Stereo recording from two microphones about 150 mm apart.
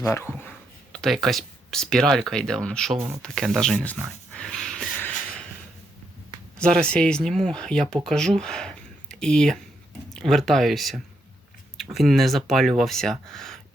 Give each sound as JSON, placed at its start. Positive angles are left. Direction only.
{"t": 0.0, "sound": "speech", "side_deg": 15}
{"t": 0.9, "sound": "speech", "side_deg": 0}
{"t": 4.3, "sound": "snort", "side_deg": 5}
{"t": 6.6, "sound": "speech", "side_deg": 5}